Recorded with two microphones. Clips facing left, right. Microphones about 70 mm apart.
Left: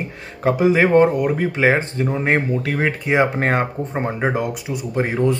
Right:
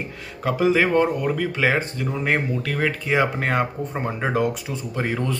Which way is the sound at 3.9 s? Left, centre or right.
Left.